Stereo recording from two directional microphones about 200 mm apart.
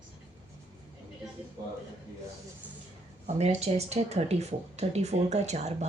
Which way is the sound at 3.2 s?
30° right (ahead or behind).